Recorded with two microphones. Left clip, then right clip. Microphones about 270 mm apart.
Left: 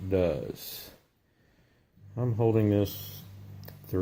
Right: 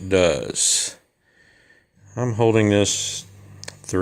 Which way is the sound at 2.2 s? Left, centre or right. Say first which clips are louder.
Right 9 dB; right.